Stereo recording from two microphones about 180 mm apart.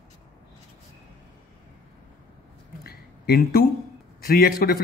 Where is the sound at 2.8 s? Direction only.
60° left (ahead or behind).